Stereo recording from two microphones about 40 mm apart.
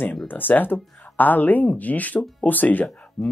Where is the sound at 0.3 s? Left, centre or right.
Left.